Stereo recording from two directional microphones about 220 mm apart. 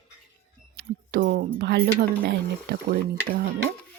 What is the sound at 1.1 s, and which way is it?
Speech, 40° right (ahead or behind).